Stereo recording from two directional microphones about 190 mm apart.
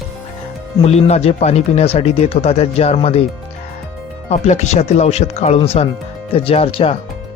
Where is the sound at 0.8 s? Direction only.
35° left (ahead or behind).